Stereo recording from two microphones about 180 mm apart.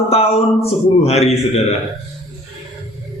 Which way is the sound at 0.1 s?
35° left (ahead or behind).